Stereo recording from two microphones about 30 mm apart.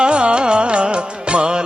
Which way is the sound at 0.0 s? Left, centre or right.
Right.